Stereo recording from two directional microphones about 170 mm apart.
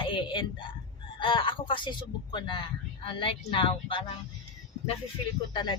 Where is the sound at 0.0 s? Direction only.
30° left (ahead or behind).